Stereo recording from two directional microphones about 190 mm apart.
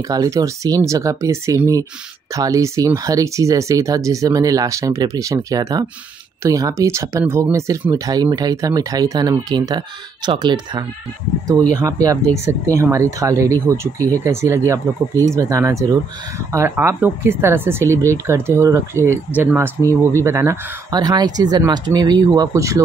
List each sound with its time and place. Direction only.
0.1 s speech: 20° right (ahead or behind)